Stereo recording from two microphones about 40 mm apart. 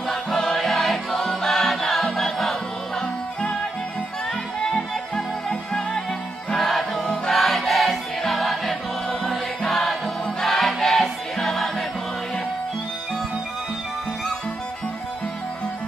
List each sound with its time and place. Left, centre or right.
0.1 s music: centre
5.1 s music: centre
7.3 s choir: centre
9.2 s music: centre
9.7 s music: centre